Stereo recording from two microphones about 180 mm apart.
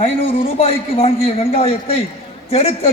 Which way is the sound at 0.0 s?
30° left (ahead or behind).